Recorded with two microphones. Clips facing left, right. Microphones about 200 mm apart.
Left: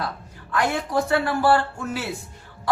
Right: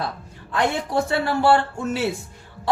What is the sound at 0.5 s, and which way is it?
A woman's voice, 25° right (ahead or behind).